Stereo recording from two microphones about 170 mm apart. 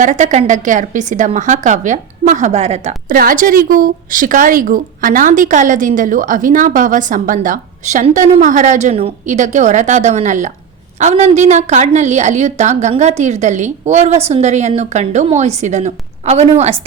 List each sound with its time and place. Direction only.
0.0 s a woman's voice: 45° right (ahead or behind)
3.1 s a woman's voice: 55° right (ahead or behind)